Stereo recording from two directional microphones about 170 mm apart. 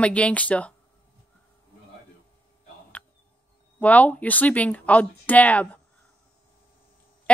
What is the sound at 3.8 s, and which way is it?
Speech, 10° left (ahead or behind).